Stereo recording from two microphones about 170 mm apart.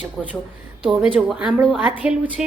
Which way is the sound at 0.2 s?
Centre (ahead or behind).